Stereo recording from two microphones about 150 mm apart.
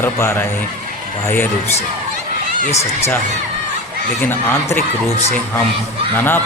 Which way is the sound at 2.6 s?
45° left (ahead or behind).